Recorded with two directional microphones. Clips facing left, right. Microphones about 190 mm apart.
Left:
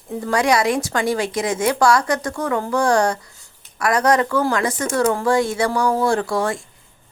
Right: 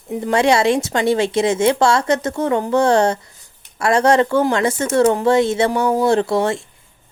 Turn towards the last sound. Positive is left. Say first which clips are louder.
# right 4 dB
turn(degrees=-25)  # may be behind; listen again after turning